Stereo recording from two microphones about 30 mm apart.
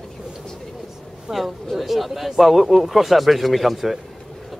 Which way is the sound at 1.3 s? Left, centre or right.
Centre.